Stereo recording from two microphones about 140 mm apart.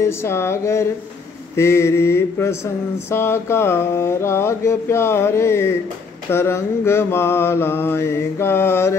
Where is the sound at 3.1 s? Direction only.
20° left (ahead or behind).